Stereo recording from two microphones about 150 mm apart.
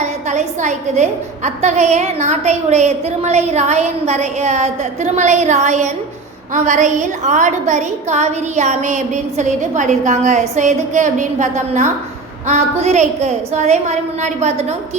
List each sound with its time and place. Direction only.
0.0 s a woman's voice: 50° right (ahead or behind)